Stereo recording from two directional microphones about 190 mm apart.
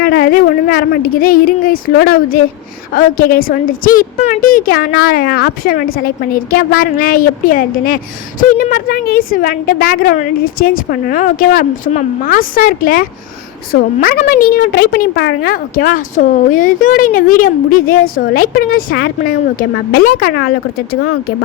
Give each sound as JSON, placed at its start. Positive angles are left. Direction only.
{"t": 0.0, "sound": "a woman's voice", "side_deg": 50}